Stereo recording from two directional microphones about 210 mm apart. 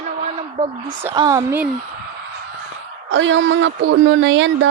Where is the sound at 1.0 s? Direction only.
15° right (ahead or behind).